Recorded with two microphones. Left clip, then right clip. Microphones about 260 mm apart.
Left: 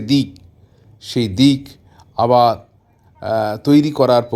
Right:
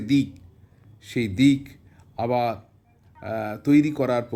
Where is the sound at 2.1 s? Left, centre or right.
Centre.